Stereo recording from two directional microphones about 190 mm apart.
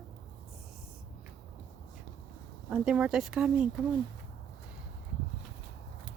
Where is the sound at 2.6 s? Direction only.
5° right (ahead or behind).